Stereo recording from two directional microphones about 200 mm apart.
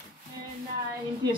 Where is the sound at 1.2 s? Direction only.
20° right (ahead or behind).